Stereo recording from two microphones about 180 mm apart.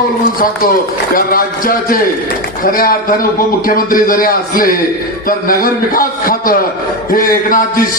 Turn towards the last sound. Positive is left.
turn(degrees=50)  # may be behind; listen again after turning